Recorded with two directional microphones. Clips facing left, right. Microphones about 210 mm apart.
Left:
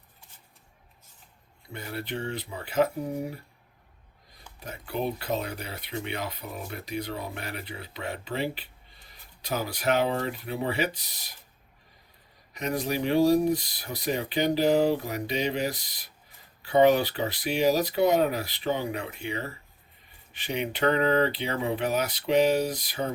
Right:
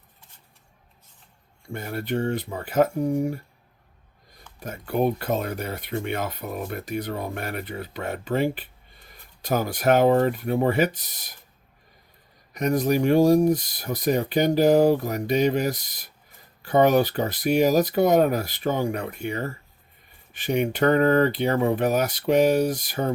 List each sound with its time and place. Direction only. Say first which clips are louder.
1.6 s speech: right 5 dB; 50° right (ahead or behind)
4.6 s speech: right 7 dB; 50° right (ahead or behind)
12.5 s speech: right 7 dB; 45° right (ahead or behind)